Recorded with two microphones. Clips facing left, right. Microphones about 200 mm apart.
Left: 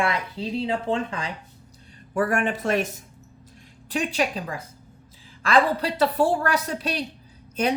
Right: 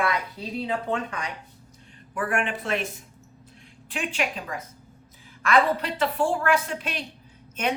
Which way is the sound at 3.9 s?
35° left (ahead or behind).